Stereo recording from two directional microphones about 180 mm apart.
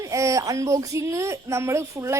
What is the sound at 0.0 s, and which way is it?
Speech, 15° right (ahead or behind).